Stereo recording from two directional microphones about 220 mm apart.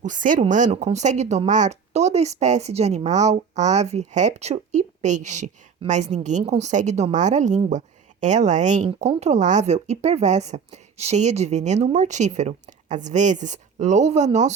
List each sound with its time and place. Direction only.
0.0 s speech: 35° right (ahead or behind)